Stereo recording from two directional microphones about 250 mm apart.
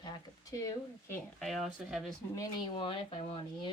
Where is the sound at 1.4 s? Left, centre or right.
Centre.